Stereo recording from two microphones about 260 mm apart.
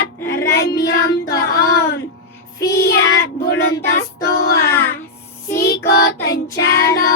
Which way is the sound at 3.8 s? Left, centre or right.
Left.